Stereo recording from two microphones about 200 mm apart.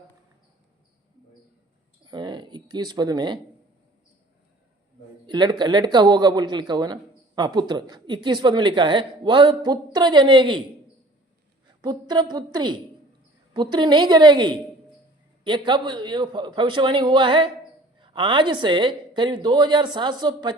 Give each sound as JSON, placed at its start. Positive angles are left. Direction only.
{"t": 2.0, "sound": "speech", "side_deg": -20}
{"t": 5.2, "sound": "speech", "side_deg": -20}
{"t": 11.8, "sound": "speech", "side_deg": -20}